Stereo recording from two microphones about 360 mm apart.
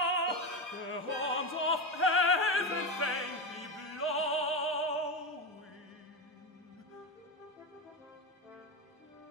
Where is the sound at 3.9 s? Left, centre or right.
Left.